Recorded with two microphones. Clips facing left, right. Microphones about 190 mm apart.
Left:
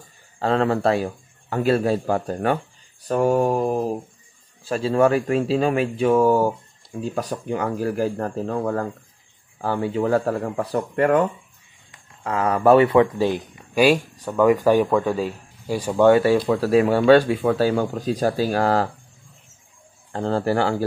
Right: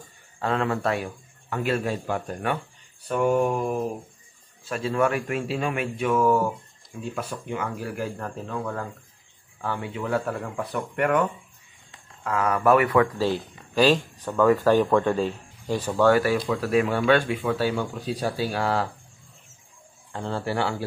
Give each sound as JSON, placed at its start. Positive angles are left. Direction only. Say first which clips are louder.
{"t": 0.4, "sound": "a man's voice", "louder": "left 5 dB", "side_deg": 35}
{"t": 20.1, "sound": "a man's voice", "louder": "left 7 dB", "side_deg": 40}